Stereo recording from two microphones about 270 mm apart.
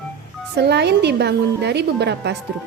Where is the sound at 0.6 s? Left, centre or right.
Right.